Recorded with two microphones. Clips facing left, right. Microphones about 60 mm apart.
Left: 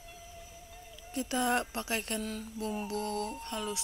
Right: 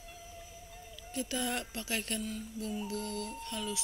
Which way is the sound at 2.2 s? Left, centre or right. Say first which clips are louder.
Left 1 dB; left.